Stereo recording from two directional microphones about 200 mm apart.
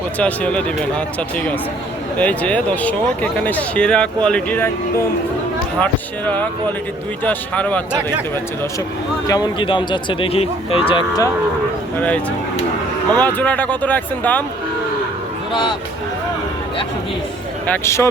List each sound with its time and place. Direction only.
0.2 s speech: 5° left (ahead or behind)
2.1 s speech: 5° left (ahead or behind)
9.2 s speech: 20° left (ahead or behind)
11.9 s speech: 5° left (ahead or behind)
17.7 s speech: 15° left (ahead or behind)